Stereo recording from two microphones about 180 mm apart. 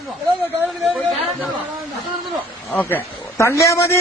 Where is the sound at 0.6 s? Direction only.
Centre (ahead or behind).